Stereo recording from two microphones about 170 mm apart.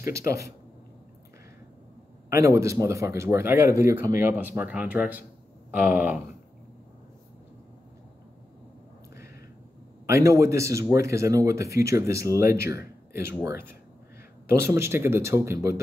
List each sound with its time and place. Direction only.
0.1 s speech: 20° right (ahead or behind)
2.2 s speech: 15° right (ahead or behind)
10.0 s speech: 15° right (ahead or behind)